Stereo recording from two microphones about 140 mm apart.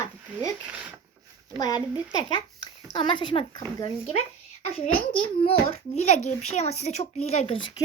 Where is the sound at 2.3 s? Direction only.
35° left (ahead or behind).